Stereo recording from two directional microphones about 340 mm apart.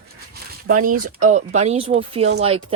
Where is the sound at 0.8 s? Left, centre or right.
Right.